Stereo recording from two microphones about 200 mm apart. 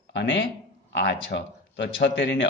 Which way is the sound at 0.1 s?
65° left (ahead or behind).